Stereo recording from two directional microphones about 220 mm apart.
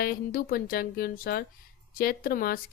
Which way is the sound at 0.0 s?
40° left (ahead or behind).